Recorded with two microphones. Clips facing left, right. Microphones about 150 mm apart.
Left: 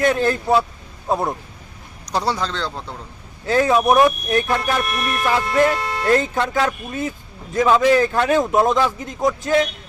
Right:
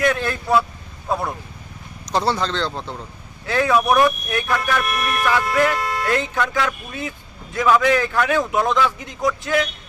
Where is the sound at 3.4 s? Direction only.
35° left (ahead or behind).